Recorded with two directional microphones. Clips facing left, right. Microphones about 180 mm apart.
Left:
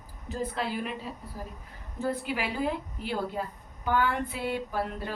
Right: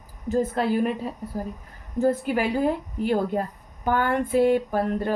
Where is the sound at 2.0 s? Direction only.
45° right (ahead or behind).